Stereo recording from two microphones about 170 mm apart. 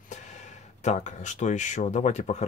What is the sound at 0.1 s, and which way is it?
Speech, 45° left (ahead or behind).